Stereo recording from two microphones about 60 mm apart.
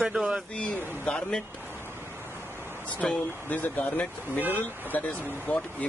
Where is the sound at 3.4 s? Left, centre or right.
Left.